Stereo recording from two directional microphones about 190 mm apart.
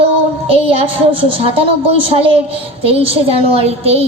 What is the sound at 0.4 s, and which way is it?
A woman's voice, 30° right (ahead or behind).